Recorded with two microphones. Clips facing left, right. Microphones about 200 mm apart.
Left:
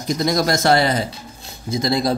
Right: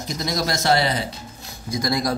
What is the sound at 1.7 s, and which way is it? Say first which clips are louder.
Speech: left 4 dB; 25° left (ahead or behind).